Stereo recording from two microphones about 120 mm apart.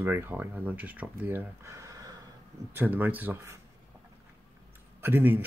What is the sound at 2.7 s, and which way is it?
Speech, 15° right (ahead or behind).